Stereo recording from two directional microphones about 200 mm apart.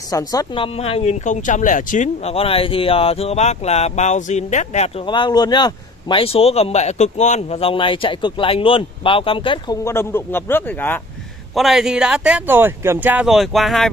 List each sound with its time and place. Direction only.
0.1 s speech: 20° left (ahead or behind)
9.8 s speech: 10° left (ahead or behind)
11.5 s speech: centre (ahead or behind)